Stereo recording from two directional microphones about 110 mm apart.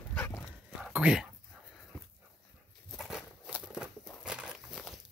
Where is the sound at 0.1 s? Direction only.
15° left (ahead or behind).